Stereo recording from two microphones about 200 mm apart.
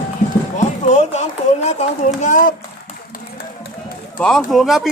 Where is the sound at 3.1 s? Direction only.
50° left (ahead or behind).